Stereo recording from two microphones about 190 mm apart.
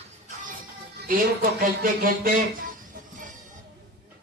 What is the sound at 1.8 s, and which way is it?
Speech, 50° right (ahead or behind).